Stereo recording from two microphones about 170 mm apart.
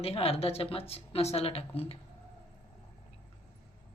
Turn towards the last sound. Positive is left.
turn(degrees=35)  # may be behind; listen again after turning